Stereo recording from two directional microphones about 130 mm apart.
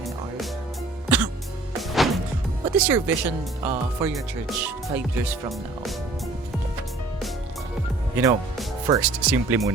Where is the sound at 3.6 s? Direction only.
25° right (ahead or behind).